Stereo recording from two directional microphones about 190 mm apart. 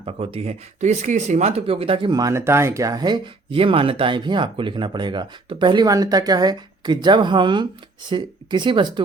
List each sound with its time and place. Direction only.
0.0 s speech: 30° right (ahead or behind)